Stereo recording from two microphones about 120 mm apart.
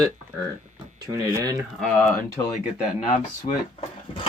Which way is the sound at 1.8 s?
Centre (ahead or behind).